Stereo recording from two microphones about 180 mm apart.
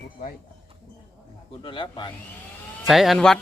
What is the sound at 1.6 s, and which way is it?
Speech, 30° left (ahead or behind).